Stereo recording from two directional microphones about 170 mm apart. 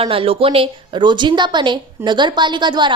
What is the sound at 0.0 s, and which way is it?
A woman's voice, 35° right (ahead or behind).